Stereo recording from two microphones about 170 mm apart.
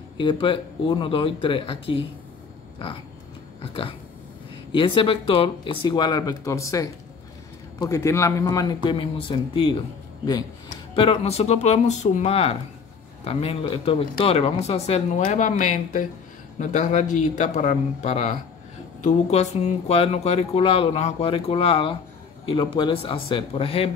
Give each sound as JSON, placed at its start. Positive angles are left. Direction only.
{"t": 0.2, "sound": "speech", "side_deg": 30}
{"t": 4.7, "sound": "speech", "side_deg": 30}
{"t": 11.0, "sound": "a man's voice", "side_deg": 35}